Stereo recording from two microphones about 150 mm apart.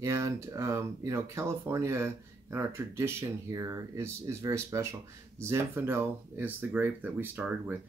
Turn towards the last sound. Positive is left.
turn(degrees=-10)  # may be behind; listen again after turning